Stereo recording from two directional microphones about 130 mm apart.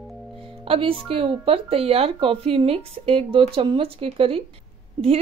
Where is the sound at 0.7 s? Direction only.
45° right (ahead or behind).